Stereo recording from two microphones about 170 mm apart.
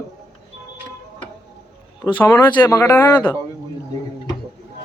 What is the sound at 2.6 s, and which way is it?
Speech, 15° left (ahead or behind).